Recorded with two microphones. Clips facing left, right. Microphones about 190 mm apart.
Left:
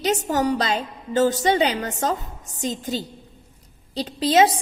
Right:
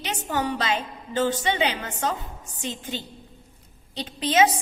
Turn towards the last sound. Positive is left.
turn(degrees=35)  # may be behind; listen again after turning